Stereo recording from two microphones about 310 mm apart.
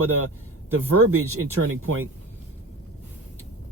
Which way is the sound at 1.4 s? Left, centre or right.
Right.